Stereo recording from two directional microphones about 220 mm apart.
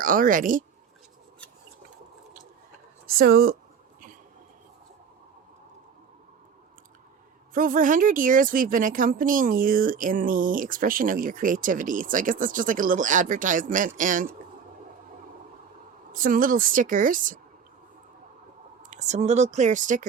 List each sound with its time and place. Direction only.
0.0 s speech: 40° right (ahead or behind)
3.2 s speech: 45° right (ahead or behind)
7.5 s speech: 40° right (ahead or behind)
16.1 s speech: 40° right (ahead or behind)
18.9 s speech: 30° right (ahead or behind)